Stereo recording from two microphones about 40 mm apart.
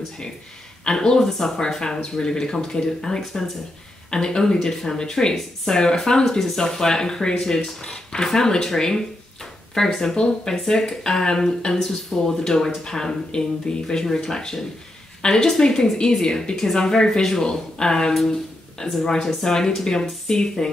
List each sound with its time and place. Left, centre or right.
0.8 s speech: centre
4.1 s speech: centre
18.2 s a sound: centre
18.9 s speech: centre